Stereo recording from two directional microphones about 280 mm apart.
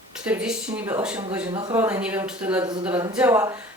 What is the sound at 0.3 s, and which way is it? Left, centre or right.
Speech, centre.